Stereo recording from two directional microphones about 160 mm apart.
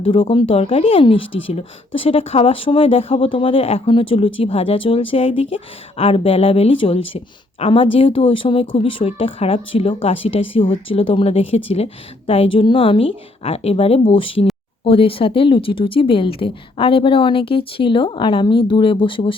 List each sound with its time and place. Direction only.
0.0 s speech: 35° left (ahead or behind)